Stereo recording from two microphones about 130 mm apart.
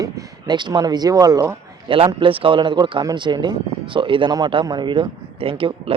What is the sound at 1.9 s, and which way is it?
Speech, 40° right (ahead or behind).